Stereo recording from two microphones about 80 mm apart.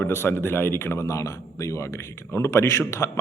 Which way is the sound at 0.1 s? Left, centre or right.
Left.